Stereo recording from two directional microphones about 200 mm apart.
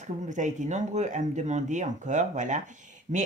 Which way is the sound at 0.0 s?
40° right (ahead or behind).